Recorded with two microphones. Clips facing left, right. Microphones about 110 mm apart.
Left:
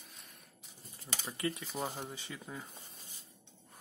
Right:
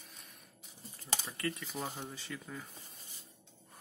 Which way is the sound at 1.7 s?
5° left (ahead or behind).